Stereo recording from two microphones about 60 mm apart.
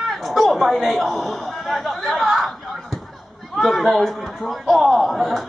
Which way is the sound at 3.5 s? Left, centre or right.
Centre.